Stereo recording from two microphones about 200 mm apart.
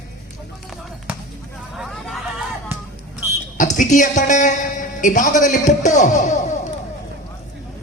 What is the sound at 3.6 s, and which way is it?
A woman's voice, 40° left (ahead or behind).